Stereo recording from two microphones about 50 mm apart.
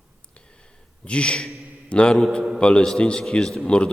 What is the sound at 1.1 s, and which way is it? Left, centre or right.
A man's voice, left.